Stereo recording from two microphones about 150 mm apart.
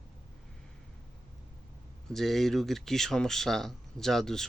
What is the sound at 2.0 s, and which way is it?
Speech, centre (ahead or behind).